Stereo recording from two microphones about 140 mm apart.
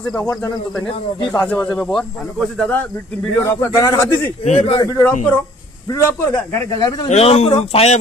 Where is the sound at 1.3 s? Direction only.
15° left (ahead or behind).